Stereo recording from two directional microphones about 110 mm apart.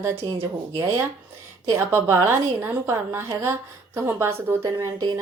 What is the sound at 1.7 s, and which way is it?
A woman's voice, 20° right (ahead or behind).